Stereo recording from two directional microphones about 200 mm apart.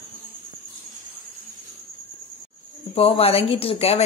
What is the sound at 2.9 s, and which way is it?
A woman's voice, 30° left (ahead or behind).